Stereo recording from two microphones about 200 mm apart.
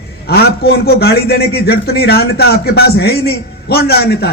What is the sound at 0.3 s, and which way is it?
Speech, 50° left (ahead or behind).